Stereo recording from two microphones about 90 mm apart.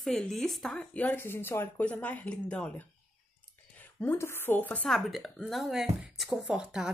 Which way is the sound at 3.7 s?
20° left (ahead or behind).